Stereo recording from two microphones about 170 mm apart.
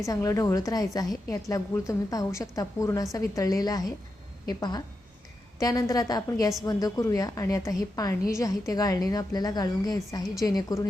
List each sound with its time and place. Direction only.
0.0 s a woman's voice: 20° left (ahead or behind)